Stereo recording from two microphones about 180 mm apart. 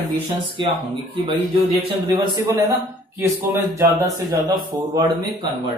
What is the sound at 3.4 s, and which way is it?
Speech, 10° right (ahead or behind).